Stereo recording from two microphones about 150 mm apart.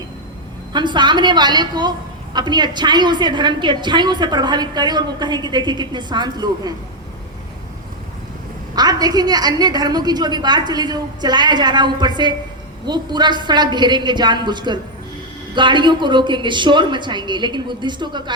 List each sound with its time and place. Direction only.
0.7 s a woman's voice: 30° right (ahead or behind)
8.7 s a woman's voice: 25° right (ahead or behind)